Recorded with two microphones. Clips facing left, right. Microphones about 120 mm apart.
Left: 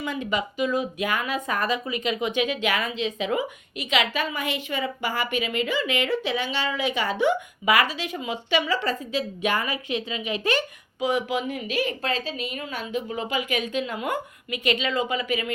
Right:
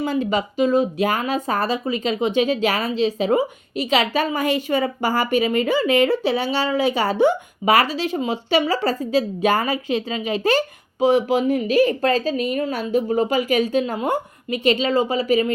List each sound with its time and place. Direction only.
0.0 s speech: 35° right (ahead or behind)